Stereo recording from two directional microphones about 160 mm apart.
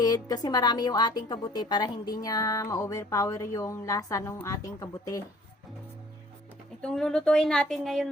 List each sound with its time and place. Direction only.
0.0 s speech: 25° left (ahead or behind)
6.8 s speech: 5° left (ahead or behind)